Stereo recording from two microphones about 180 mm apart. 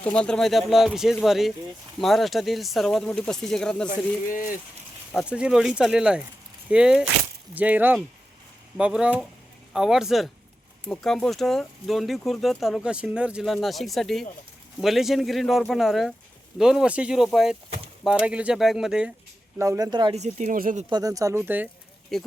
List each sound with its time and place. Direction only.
0.0 s speech: 5° left (ahead or behind)
4.3 s speech: 50° left (ahead or behind)
5.1 s speech: 5° right (ahead or behind)
19.5 s speech: 15° right (ahead or behind)
20.1 s speech: 40° right (ahead or behind)
20.9 s speech: 20° right (ahead or behind)
22.1 s speech: centre (ahead or behind)